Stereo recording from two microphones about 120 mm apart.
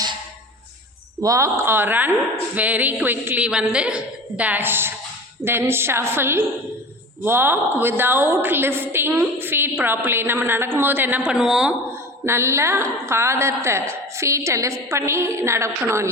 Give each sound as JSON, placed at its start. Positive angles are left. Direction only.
{"t": 1.2, "sound": "a woman's voice", "side_deg": -25}
{"t": 12.2, "sound": "a woman's voice", "side_deg": -20}